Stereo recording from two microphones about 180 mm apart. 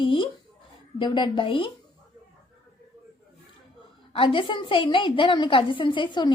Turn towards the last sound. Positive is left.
turn(degrees=25)  # may be behind; listen again after turning